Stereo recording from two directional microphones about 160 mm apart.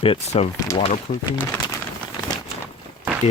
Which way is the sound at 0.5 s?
25° left (ahead or behind).